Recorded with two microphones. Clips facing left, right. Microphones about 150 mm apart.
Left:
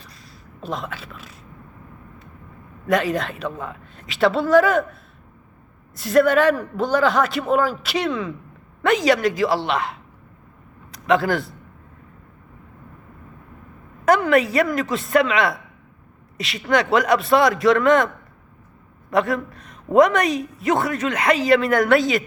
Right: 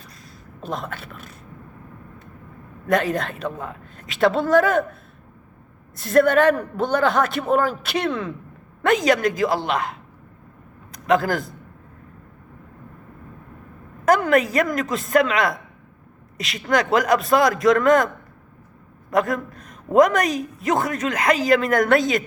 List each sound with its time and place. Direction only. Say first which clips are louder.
0.6 s a woman's voice: even; 55° right (ahead or behind)
2.8 s a woman's voice: even; 50° right (ahead or behind)
6.0 s a woman's voice: even; 50° right (ahead or behind)
14.0 s a woman's voice: left 1 dB; 45° right (ahead or behind)
20.0 s a woman's voice: left 1 dB; 45° right (ahead or behind)
20.2 s a woman's voice: left 2 dB; centre (ahead or behind)
20.7 s a woman's voice: left 1 dB; 40° right (ahead or behind)